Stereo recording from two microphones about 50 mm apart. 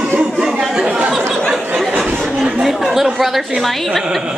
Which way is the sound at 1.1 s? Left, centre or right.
Centre.